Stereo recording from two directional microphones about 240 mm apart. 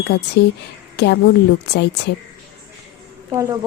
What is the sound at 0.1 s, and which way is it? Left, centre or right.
A woman's voice, left.